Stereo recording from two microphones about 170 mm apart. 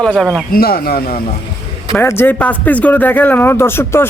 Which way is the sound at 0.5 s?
65° left (ahead or behind).